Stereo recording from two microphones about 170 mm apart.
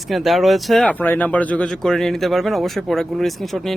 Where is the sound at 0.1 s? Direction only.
Centre (ahead or behind).